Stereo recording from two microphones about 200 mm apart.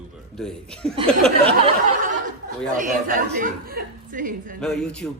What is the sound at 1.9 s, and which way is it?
Speech, 40° right (ahead or behind).